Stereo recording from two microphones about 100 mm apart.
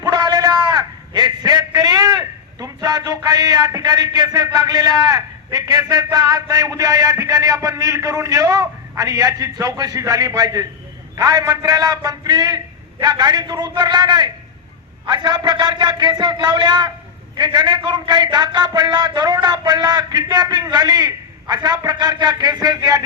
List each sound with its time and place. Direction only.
0.0 s a man's voice: 45° right (ahead or behind)